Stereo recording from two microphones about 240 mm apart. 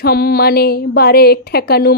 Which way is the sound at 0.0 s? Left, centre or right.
Left.